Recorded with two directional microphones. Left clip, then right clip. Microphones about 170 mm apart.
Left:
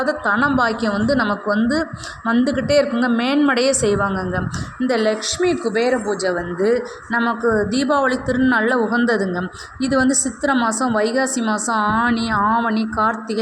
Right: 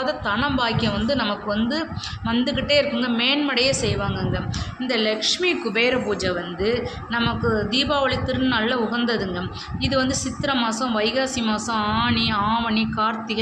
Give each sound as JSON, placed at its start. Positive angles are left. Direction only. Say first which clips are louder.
{"t": 0.0, "sound": "a woman's voice", "louder": "left 5 dB", "side_deg": 40}
{"t": 6.2, "sound": "a woman's voice", "louder": "left 5 dB", "side_deg": 40}
{"t": 12.1, "sound": "speech", "louder": "left 1 dB", "side_deg": 40}
{"t": 12.4, "sound": "speech", "louder": "left 4 dB", "side_deg": 25}